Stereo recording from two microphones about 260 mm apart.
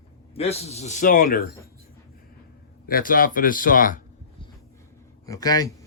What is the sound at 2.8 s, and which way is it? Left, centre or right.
Speech, left.